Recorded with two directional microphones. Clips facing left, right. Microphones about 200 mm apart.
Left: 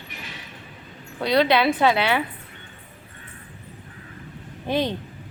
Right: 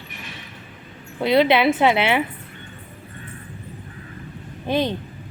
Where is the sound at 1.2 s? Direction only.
25° right (ahead or behind).